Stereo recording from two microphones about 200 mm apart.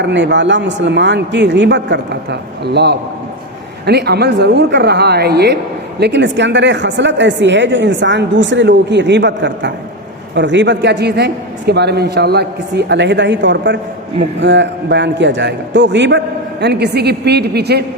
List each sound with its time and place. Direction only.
0.0 s a woman's voice: 60° right (ahead or behind)